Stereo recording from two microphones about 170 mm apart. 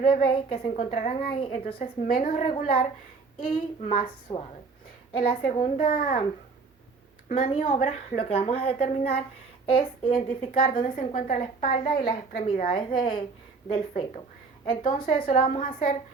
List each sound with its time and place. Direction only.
0.0 s a woman's voice: 30° left (ahead or behind)
0.8 s a woman's voice: 45° left (ahead or behind)
4.0 s a woman's voice: 30° left (ahead or behind); by 6.2 s 55° left (ahead or behind)
7.3 s a woman's voice: 50° left (ahead or behind); by 10.8 s 30° left (ahead or behind)
10.8 s a child's voice: 50° left (ahead or behind); by 14.0 s 35° left (ahead or behind)
14.8 s a woman's voice: 55° left (ahead or behind)
15.3 s a child's voice: 45° left (ahead or behind)